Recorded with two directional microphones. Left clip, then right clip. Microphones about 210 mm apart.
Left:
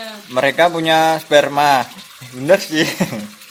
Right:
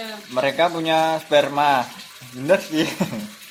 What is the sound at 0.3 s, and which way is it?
A man's voice, 45° left (ahead or behind).